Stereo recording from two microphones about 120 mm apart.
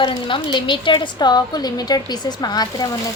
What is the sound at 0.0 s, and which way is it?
A woman's voice, 40° left (ahead or behind).